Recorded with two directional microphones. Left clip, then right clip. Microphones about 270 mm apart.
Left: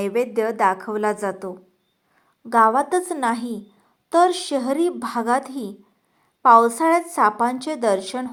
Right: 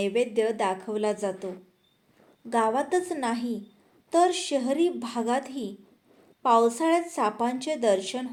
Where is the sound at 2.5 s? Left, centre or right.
Centre.